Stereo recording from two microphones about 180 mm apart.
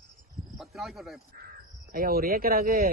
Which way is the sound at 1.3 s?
55° right (ahead or behind).